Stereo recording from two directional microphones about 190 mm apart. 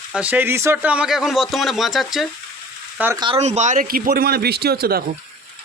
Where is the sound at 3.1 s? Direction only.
30° right (ahead or behind); by 5.0 s 55° right (ahead or behind).